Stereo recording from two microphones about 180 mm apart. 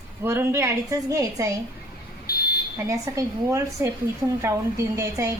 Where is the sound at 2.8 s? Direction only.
20° right (ahead or behind).